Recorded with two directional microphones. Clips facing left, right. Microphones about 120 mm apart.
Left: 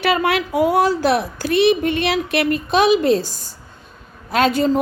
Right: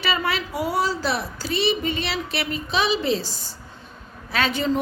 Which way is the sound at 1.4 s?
55° left (ahead or behind).